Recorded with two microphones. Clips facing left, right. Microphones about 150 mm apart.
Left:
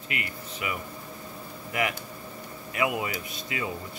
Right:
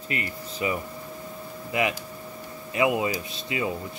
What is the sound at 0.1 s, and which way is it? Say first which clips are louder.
Speech: right 4 dB; 35° right (ahead or behind).